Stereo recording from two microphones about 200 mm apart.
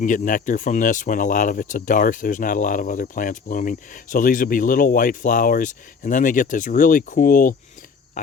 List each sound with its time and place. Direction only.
0.0 s speech: 40° left (ahead or behind)